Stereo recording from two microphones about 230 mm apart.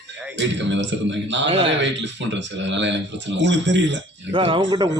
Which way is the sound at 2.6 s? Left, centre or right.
Right.